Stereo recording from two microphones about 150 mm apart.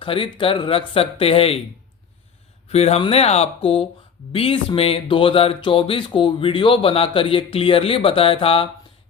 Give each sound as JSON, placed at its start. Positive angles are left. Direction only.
{"t": 0.0, "sound": "speech", "side_deg": 35}
{"t": 2.6, "sound": "speech", "side_deg": 45}